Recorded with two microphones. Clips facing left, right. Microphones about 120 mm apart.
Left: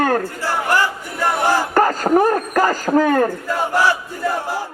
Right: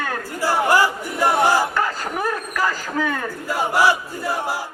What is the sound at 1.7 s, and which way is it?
A man's voice, 45° left (ahead or behind).